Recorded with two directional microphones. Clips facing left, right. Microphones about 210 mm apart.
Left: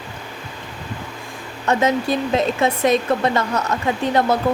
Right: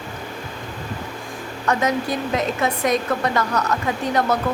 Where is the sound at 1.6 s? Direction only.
25° left (ahead or behind).